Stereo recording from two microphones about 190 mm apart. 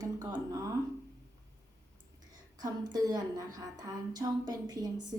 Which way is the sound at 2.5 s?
20° right (ahead or behind).